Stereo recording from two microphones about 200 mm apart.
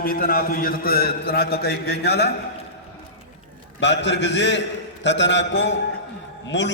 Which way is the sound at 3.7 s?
60° left (ahead or behind).